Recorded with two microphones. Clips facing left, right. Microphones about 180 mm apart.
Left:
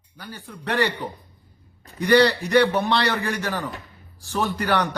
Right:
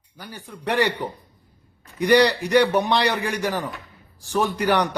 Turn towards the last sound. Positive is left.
turn(degrees=-15)  # may be behind; listen again after turning